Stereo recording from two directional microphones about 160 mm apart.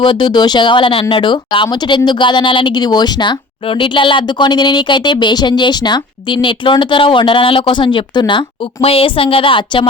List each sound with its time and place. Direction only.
0.0 s speech: 30° left (ahead or behind)